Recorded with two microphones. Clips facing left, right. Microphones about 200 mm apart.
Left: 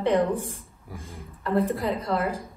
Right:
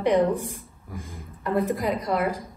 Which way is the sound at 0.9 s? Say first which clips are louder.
Right 2 dB; 30° left (ahead or behind).